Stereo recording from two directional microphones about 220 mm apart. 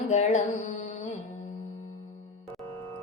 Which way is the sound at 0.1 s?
30° left (ahead or behind).